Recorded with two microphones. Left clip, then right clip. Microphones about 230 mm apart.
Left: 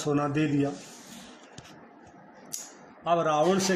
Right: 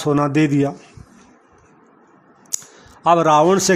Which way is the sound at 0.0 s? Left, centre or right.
Right.